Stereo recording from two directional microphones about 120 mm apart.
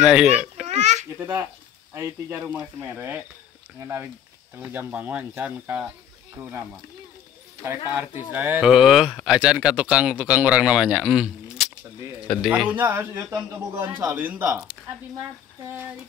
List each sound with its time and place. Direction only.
0.0 s a child's voice: 10° right (ahead or behind)
0.7 s a sound: 70° right (ahead or behind)
1.2 s speech: 20° right (ahead or behind)
7.6 s speech: 20° right (ahead or behind)
8.6 s speech: 5° right (ahead or behind)
15.7 s speech: 15° right (ahead or behind)